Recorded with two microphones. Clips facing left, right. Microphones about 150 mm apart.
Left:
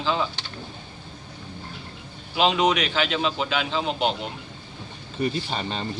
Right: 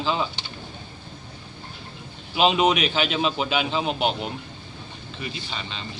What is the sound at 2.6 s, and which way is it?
Speech, 25° right (ahead or behind).